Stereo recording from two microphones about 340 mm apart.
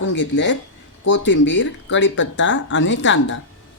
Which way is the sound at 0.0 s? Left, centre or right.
Left.